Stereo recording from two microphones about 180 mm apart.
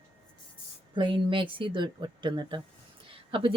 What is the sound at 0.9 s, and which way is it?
A woman's voice, 25° right (ahead or behind).